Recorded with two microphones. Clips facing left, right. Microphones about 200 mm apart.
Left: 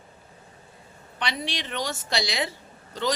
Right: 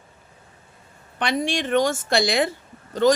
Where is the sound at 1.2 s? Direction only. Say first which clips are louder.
Right 8 dB; 50° right (ahead or behind).